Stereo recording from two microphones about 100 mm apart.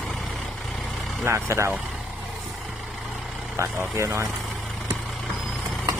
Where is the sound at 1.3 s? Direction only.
30° right (ahead or behind).